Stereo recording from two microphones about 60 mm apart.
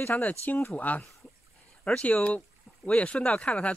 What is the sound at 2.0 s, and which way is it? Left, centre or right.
Speech, left.